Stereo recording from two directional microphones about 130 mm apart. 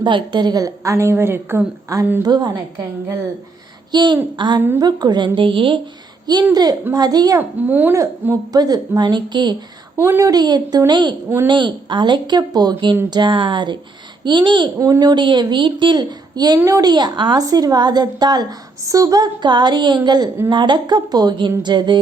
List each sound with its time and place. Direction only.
0.0 s a woman's voice: 35° right (ahead or behind)
2.2 s a woman's voice: 35° right (ahead or behind)
3.9 s a woman's voice: 35° right (ahead or behind)
6.5 s a woman's voice: 30° right (ahead or behind)
7.3 s a woman's voice: 15° right (ahead or behind); by 9.6 s 35° right (ahead or behind)
10.0 s a woman's voice: 20° right (ahead or behind); by 14.7 s 40° right (ahead or behind)
14.8 s a woman's voice: 25° right (ahead or behind)